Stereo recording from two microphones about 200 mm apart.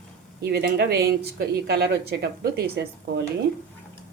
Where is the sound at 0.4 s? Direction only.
55° right (ahead or behind).